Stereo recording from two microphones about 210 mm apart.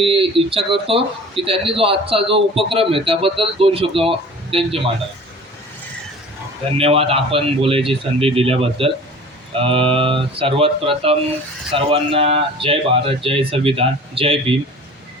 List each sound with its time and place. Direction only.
0.0 s speech: 25° right (ahead or behind)
6.7 s speech: 25° right (ahead or behind)